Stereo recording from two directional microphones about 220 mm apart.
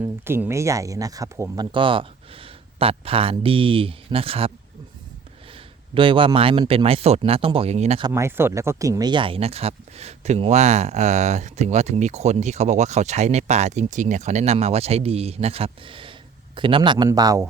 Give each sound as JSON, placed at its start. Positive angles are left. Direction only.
{"t": 0.0, "sound": "speech", "side_deg": -10}
{"t": 5.9, "sound": "speech", "side_deg": -25}
{"t": 8.1, "sound": "speech", "side_deg": -10}